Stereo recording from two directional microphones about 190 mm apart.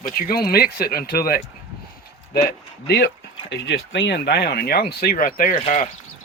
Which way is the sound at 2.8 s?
60° left (ahead or behind).